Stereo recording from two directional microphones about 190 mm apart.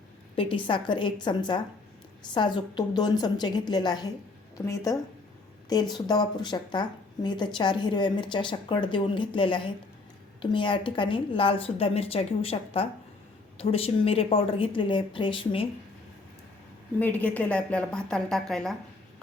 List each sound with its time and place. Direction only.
0.3 s a woman's voice: 25° left (ahead or behind)
17.0 s speech: 10° left (ahead or behind)